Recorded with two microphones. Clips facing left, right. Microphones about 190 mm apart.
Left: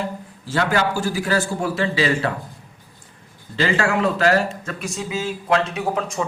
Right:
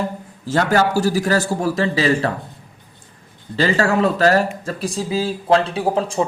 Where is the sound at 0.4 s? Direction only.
45° right (ahead or behind).